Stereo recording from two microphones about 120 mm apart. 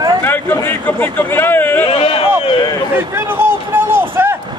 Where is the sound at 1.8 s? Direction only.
50° left (ahead or behind).